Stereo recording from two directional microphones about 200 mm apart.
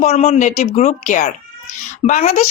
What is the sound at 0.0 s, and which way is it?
Speech, 35° left (ahead or behind).